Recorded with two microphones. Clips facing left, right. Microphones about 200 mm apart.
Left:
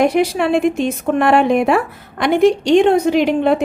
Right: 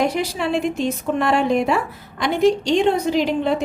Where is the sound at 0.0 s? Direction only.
60° left (ahead or behind).